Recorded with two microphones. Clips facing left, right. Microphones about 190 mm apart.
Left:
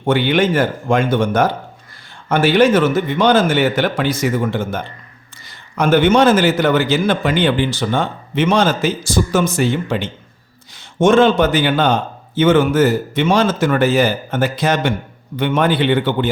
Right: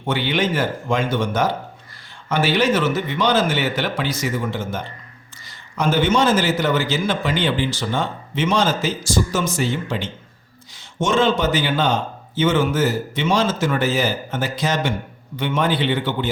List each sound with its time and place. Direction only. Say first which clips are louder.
0.0 s a man's voice: left 6 dB; 55° left (ahead or behind)